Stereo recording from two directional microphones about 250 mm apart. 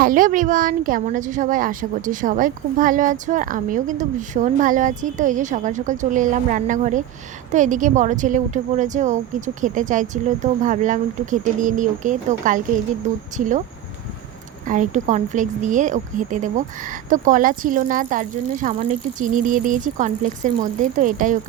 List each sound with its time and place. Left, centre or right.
0.0 s speech: right
14.7 s speech: right